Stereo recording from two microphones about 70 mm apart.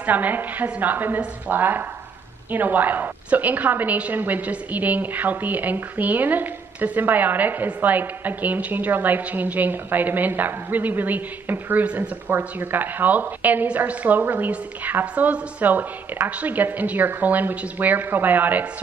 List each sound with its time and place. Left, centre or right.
0.0 s a woman's voice: right